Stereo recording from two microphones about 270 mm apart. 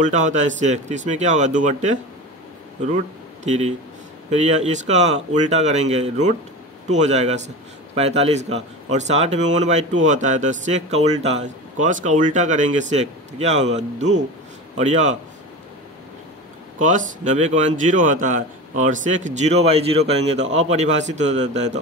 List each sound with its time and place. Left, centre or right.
0.0 s a man's voice: right
3.4 s a man's voice: right
16.7 s a man's voice: right